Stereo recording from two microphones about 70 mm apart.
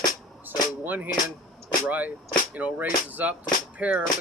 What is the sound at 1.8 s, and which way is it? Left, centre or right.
Speech, right.